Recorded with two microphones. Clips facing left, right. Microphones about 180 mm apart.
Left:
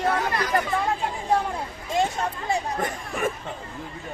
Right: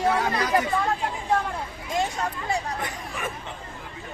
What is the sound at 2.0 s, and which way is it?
Speech, 25° left (ahead or behind).